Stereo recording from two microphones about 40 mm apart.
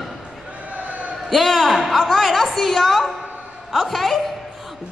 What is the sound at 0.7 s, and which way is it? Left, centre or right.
Basketball bounce, right.